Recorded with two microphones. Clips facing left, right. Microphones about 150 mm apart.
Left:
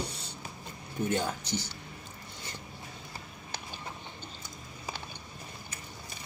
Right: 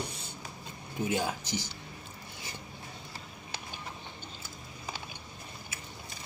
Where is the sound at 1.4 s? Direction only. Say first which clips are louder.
Left 1 dB; 65° left (ahead or behind).